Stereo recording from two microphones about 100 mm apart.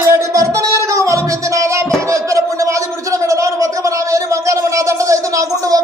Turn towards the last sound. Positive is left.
turn(degrees=-35)  # may be behind; listen again after turning